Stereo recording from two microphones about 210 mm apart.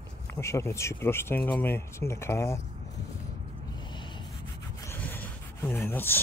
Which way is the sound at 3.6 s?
20° left (ahead or behind).